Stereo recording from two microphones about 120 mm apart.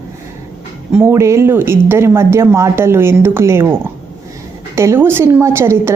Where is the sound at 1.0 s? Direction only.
25° right (ahead or behind).